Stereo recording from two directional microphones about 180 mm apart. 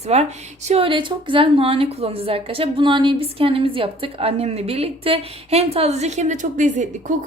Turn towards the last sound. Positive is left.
turn(degrees=-45)  # may be behind; listen again after turning